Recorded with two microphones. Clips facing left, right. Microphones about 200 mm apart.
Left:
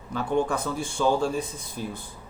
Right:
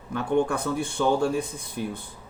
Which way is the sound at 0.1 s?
60° right (ahead or behind).